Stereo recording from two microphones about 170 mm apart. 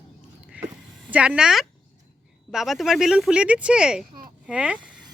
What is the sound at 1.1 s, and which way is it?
Speech, 10° right (ahead or behind).